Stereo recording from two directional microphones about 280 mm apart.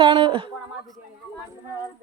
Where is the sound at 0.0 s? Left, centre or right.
Centre.